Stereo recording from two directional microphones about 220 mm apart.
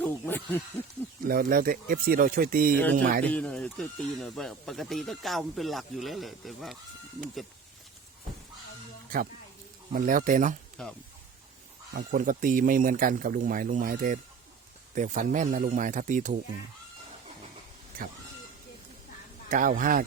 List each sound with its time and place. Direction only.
0.0 s speech: 10° left (ahead or behind)
1.3 s speech: 40° right (ahead or behind)
3.2 s speech: 5° left (ahead or behind)
9.9 s speech: 40° right (ahead or behind)
10.8 s speech: 5° left (ahead or behind)
11.9 s speech: 40° right (ahead or behind)
19.5 s speech: 35° right (ahead or behind)